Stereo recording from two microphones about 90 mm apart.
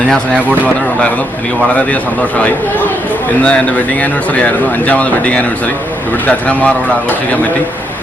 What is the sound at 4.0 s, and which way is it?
Speech, 15° left (ahead or behind).